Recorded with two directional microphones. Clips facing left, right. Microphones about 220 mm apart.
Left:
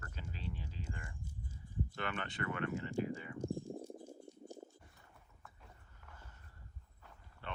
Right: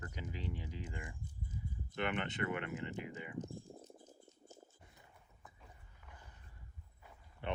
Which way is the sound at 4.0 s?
30° left (ahead or behind).